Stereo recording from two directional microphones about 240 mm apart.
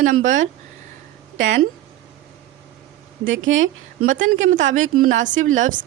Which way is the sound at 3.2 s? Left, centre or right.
Right.